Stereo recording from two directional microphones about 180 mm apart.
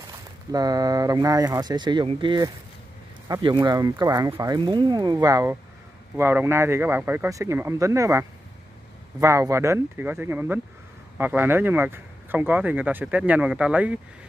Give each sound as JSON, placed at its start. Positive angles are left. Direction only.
{"t": 0.5, "sound": "speech", "side_deg": -20}